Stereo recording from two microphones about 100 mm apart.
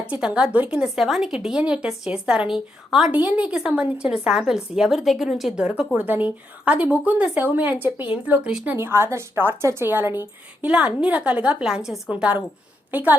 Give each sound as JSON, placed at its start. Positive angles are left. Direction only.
{"t": 0.1, "sound": "speech", "side_deg": -10}
{"t": 8.7, "sound": "a woman's voice", "side_deg": -25}